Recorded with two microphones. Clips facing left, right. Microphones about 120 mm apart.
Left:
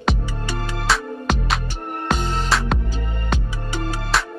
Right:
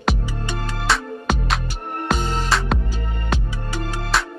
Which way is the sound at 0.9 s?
Centre (ahead or behind).